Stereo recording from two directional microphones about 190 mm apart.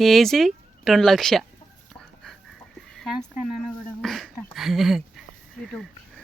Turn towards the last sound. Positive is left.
turn(degrees=0)  # may be behind; listen again after turning